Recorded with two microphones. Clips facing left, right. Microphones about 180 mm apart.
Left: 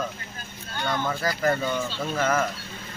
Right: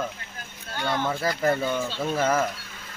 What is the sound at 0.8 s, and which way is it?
Speech, 25° right (ahead or behind).